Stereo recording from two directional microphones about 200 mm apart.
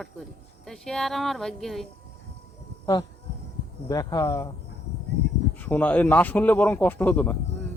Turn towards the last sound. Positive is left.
turn(degrees=10)  # may be behind; listen again after turning